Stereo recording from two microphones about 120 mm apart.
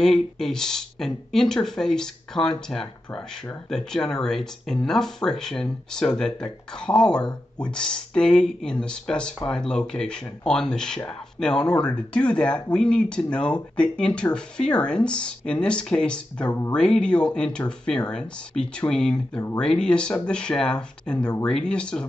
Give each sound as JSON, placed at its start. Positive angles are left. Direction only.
{"t": 0.0, "sound": "speech", "side_deg": 5}